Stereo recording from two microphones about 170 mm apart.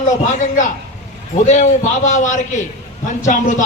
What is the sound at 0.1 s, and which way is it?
A man's voice, 45° left (ahead or behind).